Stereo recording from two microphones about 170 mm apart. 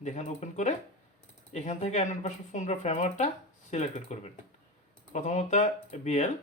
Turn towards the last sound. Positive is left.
turn(degrees=40)  # may be behind; listen again after turning